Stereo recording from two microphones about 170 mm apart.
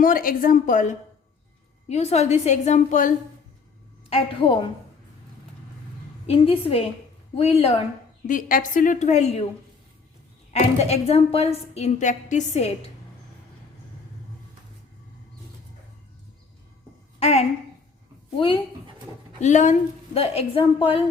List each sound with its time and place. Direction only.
0.0 s a woman's voice: 55° left (ahead or behind)
4.1 s a woman's voice: 30° left (ahead or behind)
6.2 s a woman's voice: 35° left (ahead or behind)
8.3 s a woman's voice: 55° left (ahead or behind)
10.5 s a woman's voice: 40° left (ahead or behind)
17.2 s a woman's voice: 40° left (ahead or behind)
19.4 s a woman's voice: 45° left (ahead or behind)